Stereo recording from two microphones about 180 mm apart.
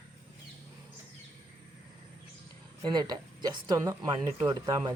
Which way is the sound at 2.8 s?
25° right (ahead or behind).